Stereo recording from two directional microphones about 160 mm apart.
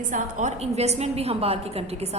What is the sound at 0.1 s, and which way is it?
A woman's voice, 50° right (ahead or behind).